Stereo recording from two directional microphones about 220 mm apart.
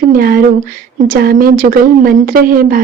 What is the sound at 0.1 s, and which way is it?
A woman's voice, 40° right (ahead or behind).